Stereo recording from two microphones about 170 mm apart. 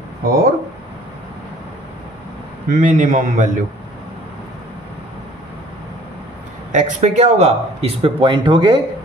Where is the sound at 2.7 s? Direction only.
50° right (ahead or behind).